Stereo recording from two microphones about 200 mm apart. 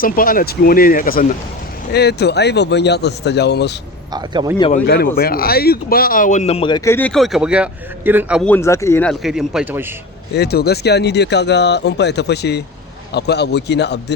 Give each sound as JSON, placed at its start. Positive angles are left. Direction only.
{"t": 0.0, "sound": "speech", "side_deg": 45}
{"t": 1.9, "sound": "speech", "side_deg": 55}
{"t": 4.1, "sound": "a man's voice", "side_deg": -20}
{"t": 4.7, "sound": "speech", "side_deg": 50}
{"t": 8.4, "sound": "a man's voice", "side_deg": 10}
{"t": 10.3, "sound": "speech", "side_deg": 55}